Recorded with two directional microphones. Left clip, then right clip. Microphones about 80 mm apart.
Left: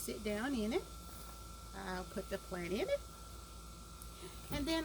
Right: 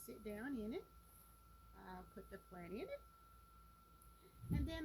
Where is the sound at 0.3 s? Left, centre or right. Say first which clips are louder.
Left 9 dB; left.